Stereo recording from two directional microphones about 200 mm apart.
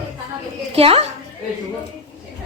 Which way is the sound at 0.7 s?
30° right (ahead or behind).